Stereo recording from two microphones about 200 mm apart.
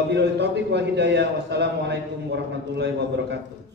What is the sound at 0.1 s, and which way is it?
A man's voice, 60° right (ahead or behind).